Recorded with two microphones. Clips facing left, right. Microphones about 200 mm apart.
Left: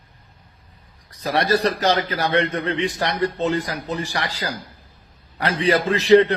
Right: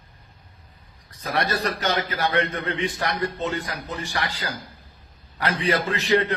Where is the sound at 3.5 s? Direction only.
90° left.